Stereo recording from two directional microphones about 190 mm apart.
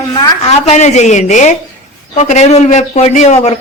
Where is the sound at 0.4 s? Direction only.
35° left (ahead or behind).